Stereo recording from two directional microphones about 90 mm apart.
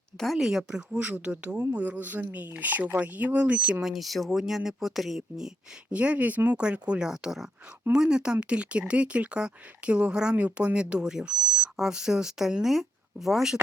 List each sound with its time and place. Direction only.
0.2 s speech: centre (ahead or behind)
3.8 s speech: centre (ahead or behind)